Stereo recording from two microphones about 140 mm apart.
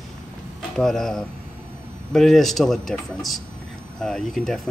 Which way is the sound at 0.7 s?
5° left (ahead or behind).